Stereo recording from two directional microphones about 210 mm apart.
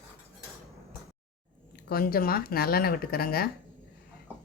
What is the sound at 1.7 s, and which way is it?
Speech, 45° left (ahead or behind).